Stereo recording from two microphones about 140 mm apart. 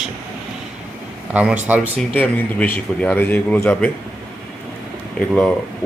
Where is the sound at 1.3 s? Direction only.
10° right (ahead or behind).